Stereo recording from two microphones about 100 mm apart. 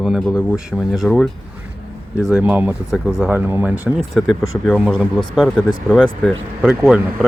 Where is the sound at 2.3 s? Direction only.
15° right (ahead or behind).